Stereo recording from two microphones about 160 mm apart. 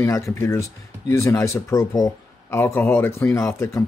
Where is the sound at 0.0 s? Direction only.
15° left (ahead or behind).